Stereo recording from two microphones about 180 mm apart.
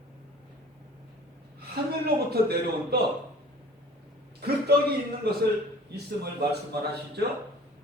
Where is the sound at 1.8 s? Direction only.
60° right (ahead or behind).